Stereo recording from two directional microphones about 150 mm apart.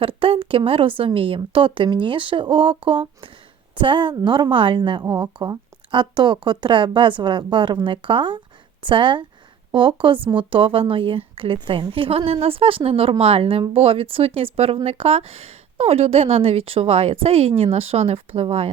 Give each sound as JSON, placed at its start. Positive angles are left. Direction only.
{"t": 0.0, "sound": "a woman's voice", "side_deg": -35}